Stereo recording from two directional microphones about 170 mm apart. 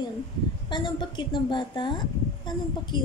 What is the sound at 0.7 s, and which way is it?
A woman's voice, 30° left (ahead or behind).